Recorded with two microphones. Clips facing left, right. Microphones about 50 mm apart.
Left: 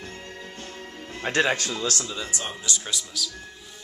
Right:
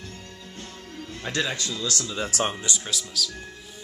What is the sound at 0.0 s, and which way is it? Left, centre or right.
Music, left.